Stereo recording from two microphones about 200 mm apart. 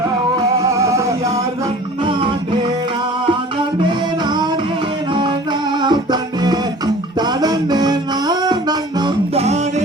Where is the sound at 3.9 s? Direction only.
20° right (ahead or behind).